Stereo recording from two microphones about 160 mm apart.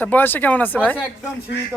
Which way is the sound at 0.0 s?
10° left (ahead or behind).